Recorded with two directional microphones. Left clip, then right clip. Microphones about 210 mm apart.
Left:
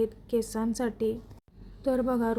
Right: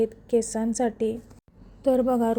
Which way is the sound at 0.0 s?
Centre (ahead or behind).